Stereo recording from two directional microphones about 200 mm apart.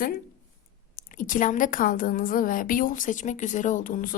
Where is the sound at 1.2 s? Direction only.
40° left (ahead or behind).